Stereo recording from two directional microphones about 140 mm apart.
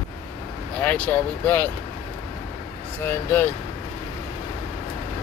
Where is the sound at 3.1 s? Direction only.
15° left (ahead or behind).